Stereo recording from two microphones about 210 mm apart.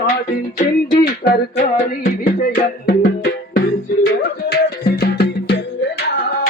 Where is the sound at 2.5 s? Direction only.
50° left (ahead or behind).